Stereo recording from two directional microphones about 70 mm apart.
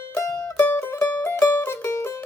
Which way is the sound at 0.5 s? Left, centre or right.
Left.